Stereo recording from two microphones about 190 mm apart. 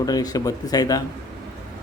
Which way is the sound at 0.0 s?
20° left (ahead or behind).